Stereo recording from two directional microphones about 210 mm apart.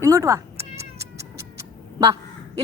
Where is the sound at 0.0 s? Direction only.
15° right (ahead or behind).